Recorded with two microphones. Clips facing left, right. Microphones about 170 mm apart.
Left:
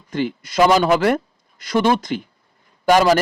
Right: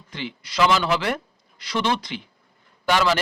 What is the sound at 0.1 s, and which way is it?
Speech, 45° left (ahead or behind).